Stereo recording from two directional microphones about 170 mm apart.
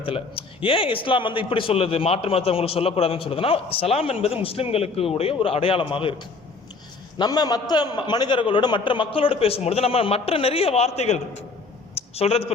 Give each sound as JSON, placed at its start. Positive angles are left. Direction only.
{"t": 0.0, "sound": "a man's voice", "side_deg": 30}